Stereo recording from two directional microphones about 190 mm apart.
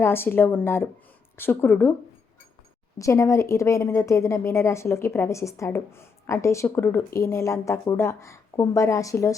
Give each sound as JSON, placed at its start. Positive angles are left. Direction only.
{"t": 0.0, "sound": "a woman's voice", "side_deg": 10}
{"t": 3.0, "sound": "a woman's voice", "side_deg": 15}